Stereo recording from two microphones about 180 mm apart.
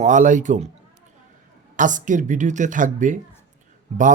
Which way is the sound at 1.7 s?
45° right (ahead or behind).